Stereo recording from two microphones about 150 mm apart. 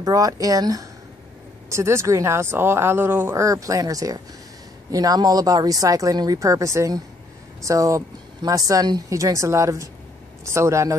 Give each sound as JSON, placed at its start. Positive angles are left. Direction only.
{"t": 0.0, "sound": "speech", "side_deg": -25}